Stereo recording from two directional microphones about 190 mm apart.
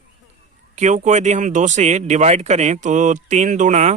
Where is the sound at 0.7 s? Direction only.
40° right (ahead or behind).